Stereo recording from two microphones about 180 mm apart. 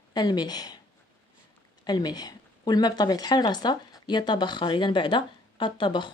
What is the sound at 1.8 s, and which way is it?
Speech, 20° left (ahead or behind).